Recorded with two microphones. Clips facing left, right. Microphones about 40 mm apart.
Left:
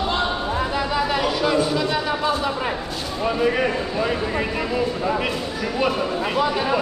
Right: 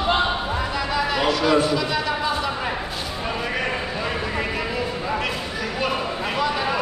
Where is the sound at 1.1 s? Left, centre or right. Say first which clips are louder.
Right 3 dB; centre.